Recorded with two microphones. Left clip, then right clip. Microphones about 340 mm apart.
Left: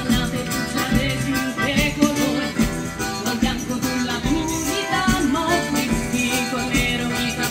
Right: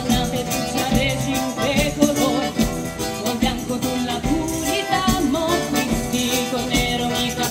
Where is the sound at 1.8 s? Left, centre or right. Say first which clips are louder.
Right 1 dB; right.